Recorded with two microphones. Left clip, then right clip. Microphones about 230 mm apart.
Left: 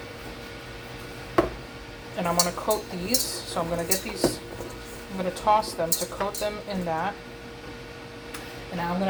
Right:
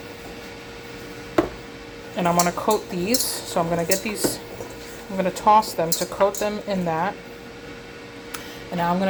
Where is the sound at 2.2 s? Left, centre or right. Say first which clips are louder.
Right 5 dB; right.